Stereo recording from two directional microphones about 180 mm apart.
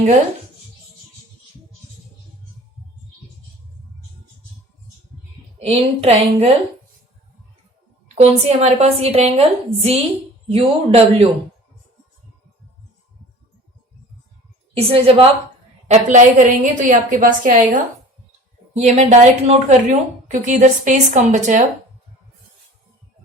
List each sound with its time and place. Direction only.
5.5 s a woman's voice: 35° right (ahead or behind)
8.0 s a woman's voice: 40° right (ahead or behind)
14.8 s a woman's voice: 30° right (ahead or behind)
15.9 s a woman's voice: 45° right (ahead or behind)
18.8 s a woman's voice: 40° right (ahead or behind)